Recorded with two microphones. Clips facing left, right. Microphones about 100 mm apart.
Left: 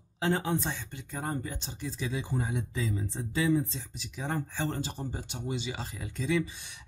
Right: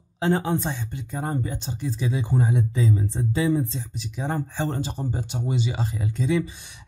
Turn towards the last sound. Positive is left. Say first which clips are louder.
# right 6 dB
turn(degrees=-25)  # may be behind; listen again after turning